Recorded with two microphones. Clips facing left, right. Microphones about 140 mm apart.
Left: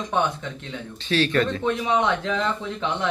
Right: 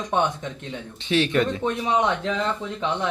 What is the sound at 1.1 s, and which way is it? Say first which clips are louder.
Speech: even; 20° right (ahead or behind).